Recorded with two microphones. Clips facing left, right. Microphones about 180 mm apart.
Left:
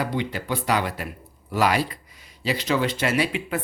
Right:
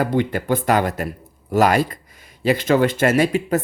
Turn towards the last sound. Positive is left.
turn(degrees=-45)  # may be behind; listen again after turning